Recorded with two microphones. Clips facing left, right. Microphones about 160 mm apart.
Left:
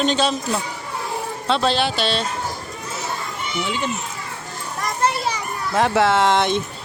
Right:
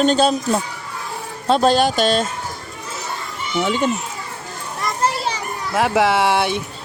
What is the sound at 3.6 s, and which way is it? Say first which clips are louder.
Speech: right 6 dB; 45° right (ahead or behind).